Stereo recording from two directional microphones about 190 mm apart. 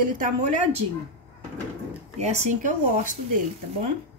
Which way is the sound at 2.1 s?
35° right (ahead or behind).